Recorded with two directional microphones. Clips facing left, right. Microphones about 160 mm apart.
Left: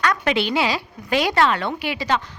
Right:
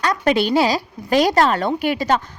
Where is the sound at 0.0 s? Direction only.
35° right (ahead or behind).